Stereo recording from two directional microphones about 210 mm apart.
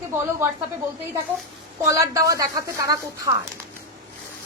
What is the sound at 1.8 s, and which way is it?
A woman's voice, 15° right (ahead or behind).